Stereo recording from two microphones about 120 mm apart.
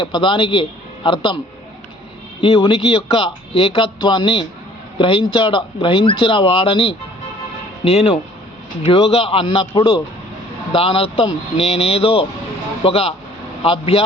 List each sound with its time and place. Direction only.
0.0 s speech: 45° left (ahead or behind)
2.4 s a man's voice: 50° left (ahead or behind)